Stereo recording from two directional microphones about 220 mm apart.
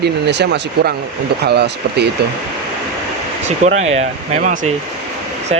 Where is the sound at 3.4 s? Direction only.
30° right (ahead or behind).